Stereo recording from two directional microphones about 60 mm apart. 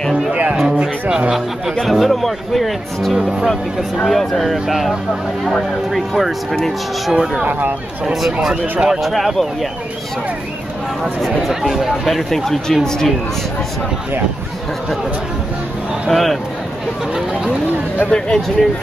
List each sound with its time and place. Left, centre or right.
0.3 s speech: right
1.8 s speech: centre
3.2 s speech: centre
3.4 s speech: centre
9.0 s speech: centre
11.1 s speech: centre
16.1 s speech: centre
18.1 s speech: centre